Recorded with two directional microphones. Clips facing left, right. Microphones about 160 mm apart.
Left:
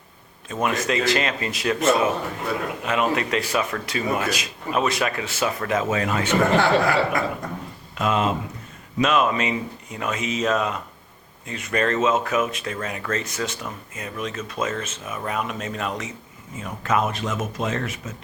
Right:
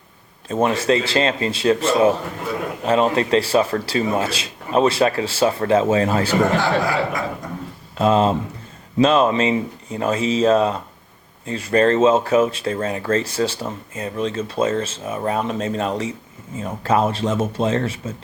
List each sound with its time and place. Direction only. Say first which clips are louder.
0.4 s speech: right 6 dB; 30° right (ahead or behind)
6.6 s speech: left 1 dB; 60° left (ahead or behind)
7.9 s speech: right 6 dB; 30° right (ahead or behind)